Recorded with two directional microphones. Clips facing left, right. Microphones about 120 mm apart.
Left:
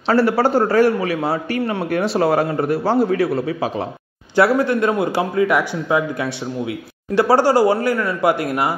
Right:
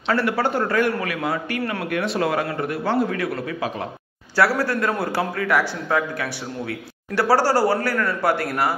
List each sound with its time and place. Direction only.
0.1 s a man's voice: 35° left (ahead or behind); by 8.7 s 15° left (ahead or behind)